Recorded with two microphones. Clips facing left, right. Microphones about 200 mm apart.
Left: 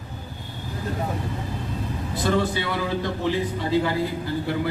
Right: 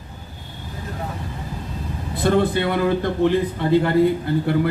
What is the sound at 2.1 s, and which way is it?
A man's voice, 55° right (ahead or behind).